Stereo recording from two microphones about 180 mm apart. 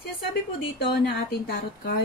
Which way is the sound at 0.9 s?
60° left (ahead or behind).